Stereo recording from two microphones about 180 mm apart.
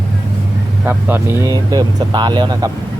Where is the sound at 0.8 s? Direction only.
10° right (ahead or behind).